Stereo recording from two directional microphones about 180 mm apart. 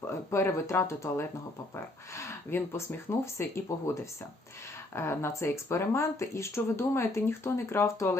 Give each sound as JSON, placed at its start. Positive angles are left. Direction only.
{"t": 0.1, "sound": "speech", "side_deg": 15}
{"t": 4.9, "sound": "speech", "side_deg": 15}